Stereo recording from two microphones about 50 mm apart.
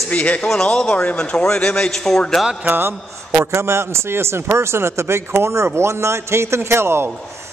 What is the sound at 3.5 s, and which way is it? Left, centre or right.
A man's voice, right.